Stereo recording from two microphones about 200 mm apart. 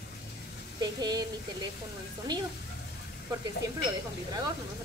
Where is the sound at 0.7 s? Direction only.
20° right (ahead or behind).